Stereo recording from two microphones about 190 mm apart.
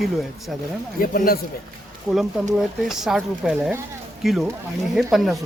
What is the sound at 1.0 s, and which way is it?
Speech, 50° left (ahead or behind).